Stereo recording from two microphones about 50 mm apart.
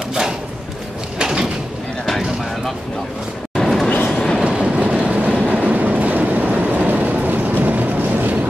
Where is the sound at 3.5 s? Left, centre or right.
Centre.